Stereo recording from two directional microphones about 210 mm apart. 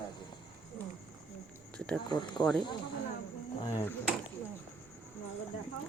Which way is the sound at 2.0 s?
20° left (ahead or behind).